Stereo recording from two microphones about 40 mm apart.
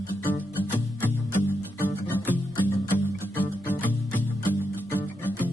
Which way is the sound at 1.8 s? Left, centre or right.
Left.